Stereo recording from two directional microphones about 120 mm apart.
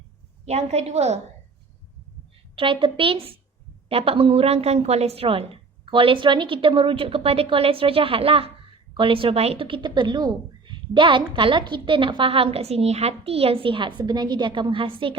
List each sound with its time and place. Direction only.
0.4 s a woman's voice: 65° right (ahead or behind)
2.6 s speech: 45° right (ahead or behind)